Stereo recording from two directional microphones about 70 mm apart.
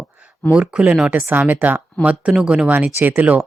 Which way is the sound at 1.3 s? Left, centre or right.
Right.